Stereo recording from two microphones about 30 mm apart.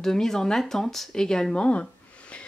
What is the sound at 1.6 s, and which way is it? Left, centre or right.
Speech, left.